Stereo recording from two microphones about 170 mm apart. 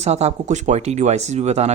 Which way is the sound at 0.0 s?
40° right (ahead or behind).